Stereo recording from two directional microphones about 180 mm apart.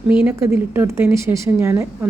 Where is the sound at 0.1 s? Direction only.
10° right (ahead or behind).